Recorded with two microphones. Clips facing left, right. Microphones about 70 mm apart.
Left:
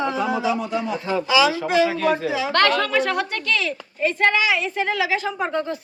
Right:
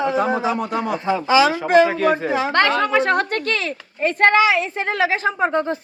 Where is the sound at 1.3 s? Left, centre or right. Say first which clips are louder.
Right 4 dB; right.